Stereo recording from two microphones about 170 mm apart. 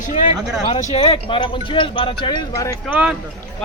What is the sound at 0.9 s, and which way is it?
Speech, 35° left (ahead or behind).